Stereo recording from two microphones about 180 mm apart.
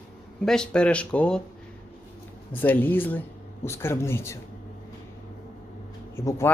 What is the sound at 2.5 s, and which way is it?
Speech, 10° left (ahead or behind).